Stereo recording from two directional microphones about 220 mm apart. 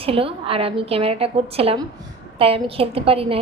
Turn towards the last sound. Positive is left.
turn(degrees=-25)  # may be behind; listen again after turning